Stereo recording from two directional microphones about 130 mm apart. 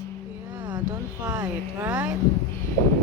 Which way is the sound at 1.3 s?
15° right (ahead or behind).